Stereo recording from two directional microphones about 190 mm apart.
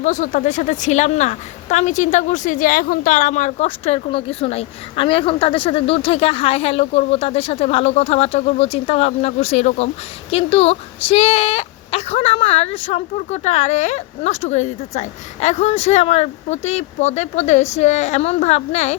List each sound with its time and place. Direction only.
0.0 s a woman's voice: 40° left (ahead or behind)